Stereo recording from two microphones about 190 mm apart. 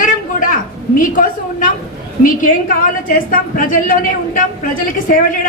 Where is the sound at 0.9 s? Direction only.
45° left (ahead or behind).